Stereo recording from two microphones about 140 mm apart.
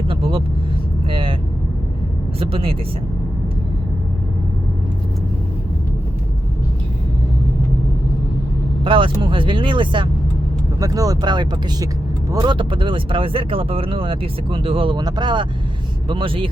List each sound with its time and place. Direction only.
0.1 s vehicle: 40° right (ahead or behind)
1.1 s speech: 40° right (ahead or behind)
2.4 s speech: 40° right (ahead or behind)
8.8 s speech: 40° right (ahead or behind)